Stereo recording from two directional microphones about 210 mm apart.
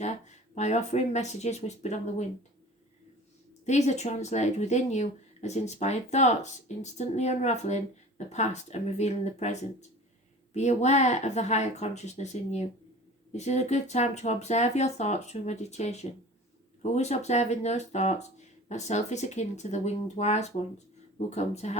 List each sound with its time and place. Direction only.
0.0 s speech: 35° left (ahead or behind)
3.7 s speech: 35° left (ahead or behind)